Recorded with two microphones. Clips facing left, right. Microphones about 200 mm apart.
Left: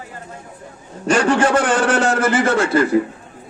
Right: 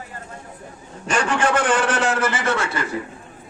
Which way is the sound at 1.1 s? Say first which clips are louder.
Left 6 dB; 40° left (ahead or behind).